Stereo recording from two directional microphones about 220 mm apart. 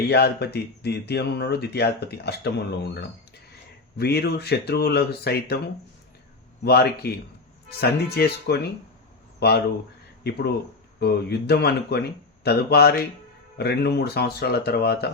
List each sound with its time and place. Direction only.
0.1 s speech: 50° left (ahead or behind)
6.7 s speech: 45° left (ahead or behind)